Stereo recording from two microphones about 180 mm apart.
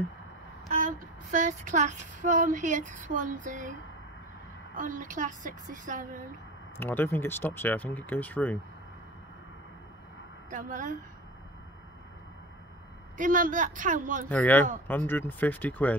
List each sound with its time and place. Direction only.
0.7 s female singing: 45° right (ahead or behind)
4.7 s female singing: 45° right (ahead or behind)
6.8 s speech: 10° left (ahead or behind)
10.5 s female singing: 45° right (ahead or behind)
13.2 s female singing: 45° right (ahead or behind)
14.3 s speech: 10° left (ahead or behind)